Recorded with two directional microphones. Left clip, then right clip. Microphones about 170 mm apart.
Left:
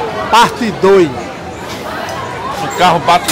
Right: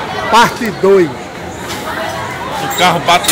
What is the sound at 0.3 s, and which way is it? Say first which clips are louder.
Speech: even; 5° left (ahead or behind).